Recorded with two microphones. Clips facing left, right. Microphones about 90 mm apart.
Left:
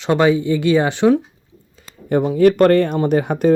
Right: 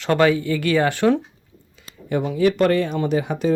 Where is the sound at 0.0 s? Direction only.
20° left (ahead or behind).